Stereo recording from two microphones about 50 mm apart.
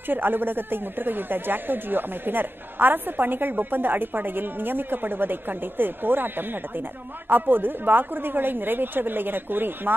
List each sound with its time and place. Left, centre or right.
0.1 s speech: right